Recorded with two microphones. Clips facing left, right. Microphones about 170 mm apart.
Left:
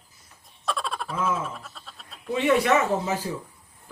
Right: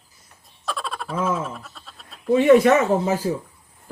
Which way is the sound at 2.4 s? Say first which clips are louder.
Right 7 dB; 45° right (ahead or behind).